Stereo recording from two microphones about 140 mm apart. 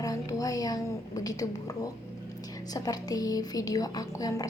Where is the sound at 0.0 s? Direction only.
25° left (ahead or behind).